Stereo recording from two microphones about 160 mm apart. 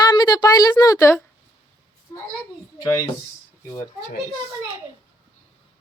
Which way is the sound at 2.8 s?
20° left (ahead or behind).